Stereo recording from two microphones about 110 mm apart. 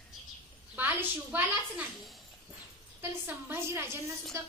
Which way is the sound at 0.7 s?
20° right (ahead or behind).